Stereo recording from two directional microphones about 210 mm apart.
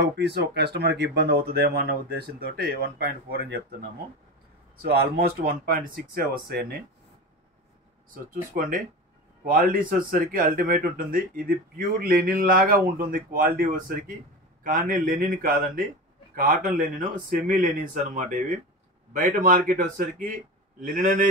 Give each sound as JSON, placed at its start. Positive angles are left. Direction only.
{"t": 0.2, "sound": "speech", "side_deg": -50}
{"t": 4.8, "sound": "speech", "side_deg": -45}
{"t": 8.1, "sound": "speech", "side_deg": -40}